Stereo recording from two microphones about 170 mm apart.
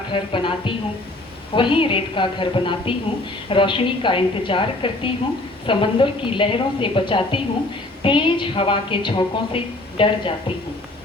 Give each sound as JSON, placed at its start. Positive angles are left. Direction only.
{"t": 0.1, "sound": "a woman's voice", "side_deg": 30}